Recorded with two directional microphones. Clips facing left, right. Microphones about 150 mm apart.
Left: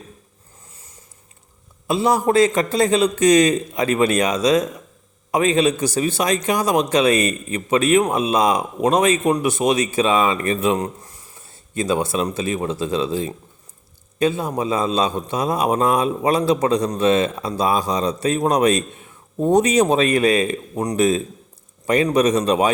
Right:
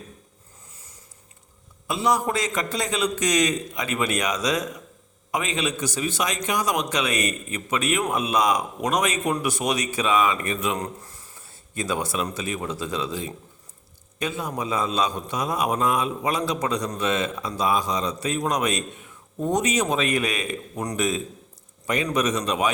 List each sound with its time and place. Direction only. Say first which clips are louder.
1.9 s a man's voice: left 6 dB; 30° left (ahead or behind)